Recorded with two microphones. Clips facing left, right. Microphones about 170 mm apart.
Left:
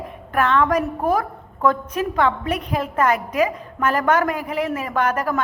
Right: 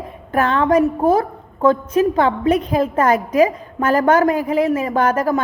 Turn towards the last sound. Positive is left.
turn(degrees=-30)  # may be behind; listen again after turning